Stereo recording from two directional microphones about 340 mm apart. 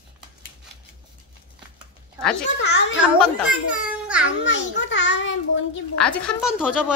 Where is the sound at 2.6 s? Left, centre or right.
Left.